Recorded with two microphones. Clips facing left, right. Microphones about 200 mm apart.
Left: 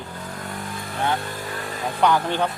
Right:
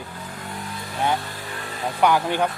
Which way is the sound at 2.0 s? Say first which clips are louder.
Right 1 dB; 10° right (ahead or behind).